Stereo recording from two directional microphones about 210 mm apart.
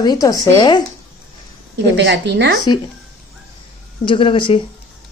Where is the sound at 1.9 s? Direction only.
55° right (ahead or behind).